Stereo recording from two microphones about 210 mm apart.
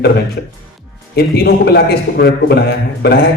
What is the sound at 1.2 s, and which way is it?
A man's voice, 45° left (ahead or behind).